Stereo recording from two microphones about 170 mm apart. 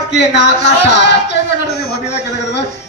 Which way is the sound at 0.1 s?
85° left.